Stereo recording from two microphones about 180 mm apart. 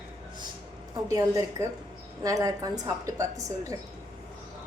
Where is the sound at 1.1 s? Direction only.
20° right (ahead or behind).